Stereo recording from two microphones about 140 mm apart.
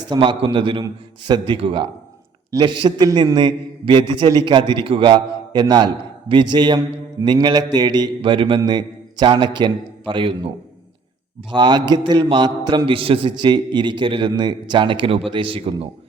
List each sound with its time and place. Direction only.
0.1 s a man's voice: 35° right (ahead or behind)
11.5 s a man's voice: 30° right (ahead or behind)